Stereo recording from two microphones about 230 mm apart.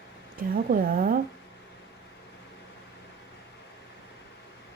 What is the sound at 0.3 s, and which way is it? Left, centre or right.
Speech, right.